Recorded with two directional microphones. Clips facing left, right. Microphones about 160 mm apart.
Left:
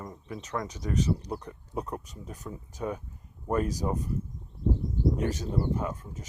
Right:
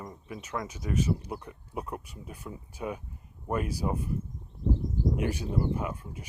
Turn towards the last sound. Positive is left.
turn(degrees=-10)  # may be behind; listen again after turning